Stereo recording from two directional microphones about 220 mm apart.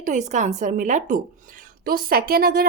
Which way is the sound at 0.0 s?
35° right (ahead or behind).